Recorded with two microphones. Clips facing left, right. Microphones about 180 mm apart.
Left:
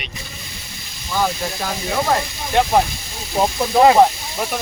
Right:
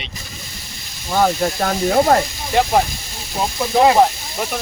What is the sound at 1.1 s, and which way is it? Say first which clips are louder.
Speech: right 5 dB; 50° right (ahead or behind).